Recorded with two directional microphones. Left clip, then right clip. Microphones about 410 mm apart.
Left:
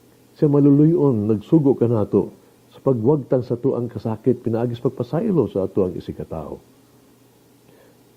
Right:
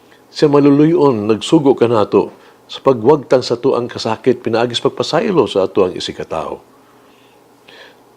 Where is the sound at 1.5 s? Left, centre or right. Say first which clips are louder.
Right 5 dB; centre.